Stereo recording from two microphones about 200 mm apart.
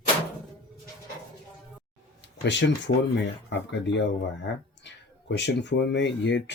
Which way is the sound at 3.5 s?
60° left (ahead or behind).